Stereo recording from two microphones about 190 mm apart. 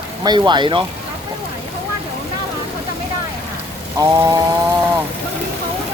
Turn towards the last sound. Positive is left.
turn(degrees=-15)  # may be behind; listen again after turning